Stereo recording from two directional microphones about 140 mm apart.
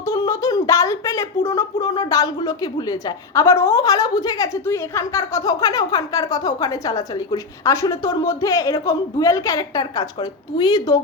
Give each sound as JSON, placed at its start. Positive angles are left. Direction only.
{"t": 0.0, "sound": "speech", "side_deg": 25}